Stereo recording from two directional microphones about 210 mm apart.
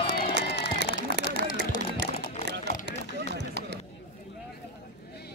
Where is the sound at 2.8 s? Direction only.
55° right (ahead or behind).